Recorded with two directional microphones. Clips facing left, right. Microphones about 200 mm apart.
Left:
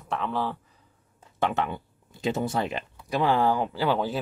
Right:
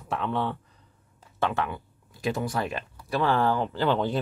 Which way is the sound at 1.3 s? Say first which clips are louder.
Left 1 dB; 20° left (ahead or behind).